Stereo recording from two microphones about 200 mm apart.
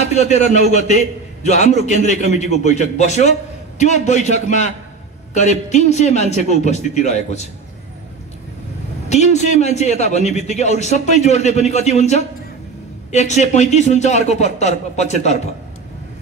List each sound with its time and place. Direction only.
0.0 s a man's voice: 35° left (ahead or behind)
9.1 s a man's voice: 35° left (ahead or behind)